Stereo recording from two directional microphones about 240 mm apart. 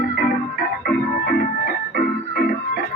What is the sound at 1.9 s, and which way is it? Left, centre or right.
Organ, left.